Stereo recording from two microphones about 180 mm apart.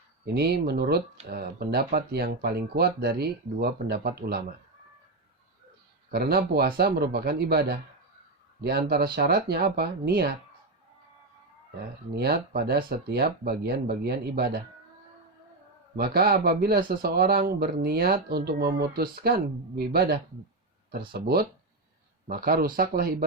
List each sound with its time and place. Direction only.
0.3 s speech: 65° right (ahead or behind)
6.1 s speech: 60° right (ahead or behind)
12.1 s speech: 60° right (ahead or behind)
16.0 s speech: 60° right (ahead or behind)